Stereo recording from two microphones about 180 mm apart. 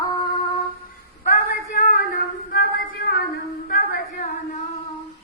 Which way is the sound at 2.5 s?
65° left (ahead or behind).